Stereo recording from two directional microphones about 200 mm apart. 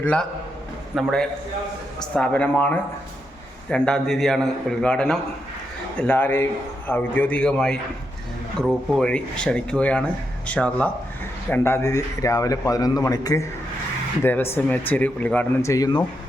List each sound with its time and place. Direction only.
0.0 s a man's voice: 5° left (ahead or behind)